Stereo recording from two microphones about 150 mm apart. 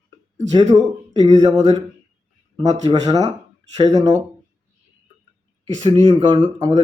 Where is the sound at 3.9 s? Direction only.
25° right (ahead or behind).